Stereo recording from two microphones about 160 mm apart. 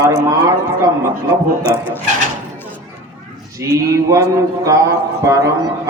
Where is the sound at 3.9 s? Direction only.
20° right (ahead or behind).